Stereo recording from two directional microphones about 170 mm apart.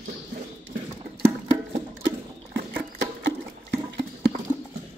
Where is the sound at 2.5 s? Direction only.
90° right.